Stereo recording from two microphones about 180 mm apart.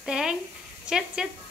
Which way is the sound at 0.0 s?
5° right (ahead or behind).